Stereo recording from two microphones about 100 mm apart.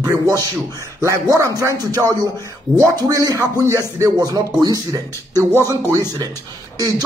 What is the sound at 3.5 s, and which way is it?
Speech, 35° right (ahead or behind).